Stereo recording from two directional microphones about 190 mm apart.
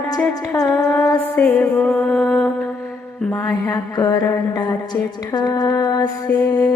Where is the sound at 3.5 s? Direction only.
20° left (ahead or behind).